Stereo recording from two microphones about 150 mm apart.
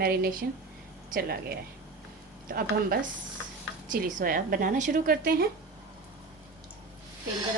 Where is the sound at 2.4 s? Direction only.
75° right (ahead or behind).